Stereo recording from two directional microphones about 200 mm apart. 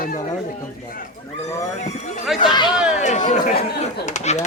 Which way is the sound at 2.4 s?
20° left (ahead or behind).